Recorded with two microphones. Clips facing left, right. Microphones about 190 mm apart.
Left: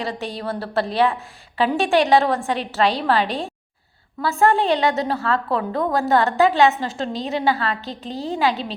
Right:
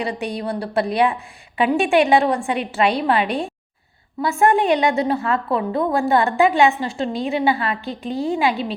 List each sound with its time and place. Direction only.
0.0 s a woman's voice: 15° right (ahead or behind)
3.2 s a woman's voice: 35° left (ahead or behind)
4.2 s a woman's voice: 15° right (ahead or behind)
8.1 s a woman's voice: 35° left (ahead or behind)
8.4 s a woman's voice: 10° right (ahead or behind)